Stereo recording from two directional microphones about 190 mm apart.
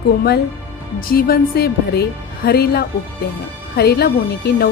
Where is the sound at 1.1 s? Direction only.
50° left (ahead or behind).